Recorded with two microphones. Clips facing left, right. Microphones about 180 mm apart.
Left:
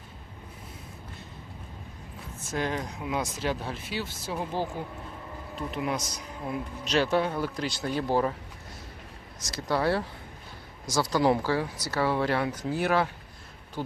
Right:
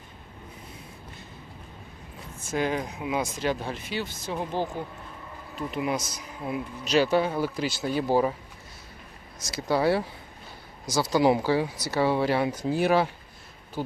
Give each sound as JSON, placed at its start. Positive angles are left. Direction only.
{"t": 2.5, "sound": "speech", "side_deg": -5}
{"t": 9.5, "sound": "speech", "side_deg": -5}